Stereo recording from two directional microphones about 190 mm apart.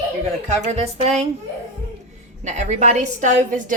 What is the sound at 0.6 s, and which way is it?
Speech, 35° right (ahead or behind).